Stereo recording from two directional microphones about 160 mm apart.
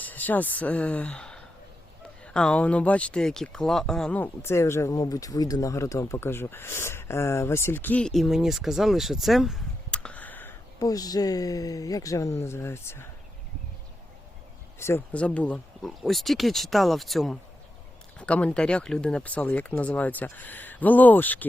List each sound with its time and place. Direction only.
0.0 s speech: 10° left (ahead or behind)
10.8 s speech: 20° left (ahead or behind)
14.8 s speech: 15° left (ahead or behind)